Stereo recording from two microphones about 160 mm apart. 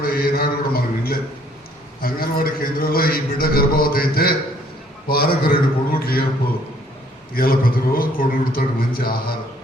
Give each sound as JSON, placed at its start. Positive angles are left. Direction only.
{"t": 0.0, "sound": "a sound", "side_deg": 70}
{"t": 2.0, "sound": "a man's voice", "side_deg": 65}
{"t": 7.3, "sound": "a man's voice", "side_deg": 65}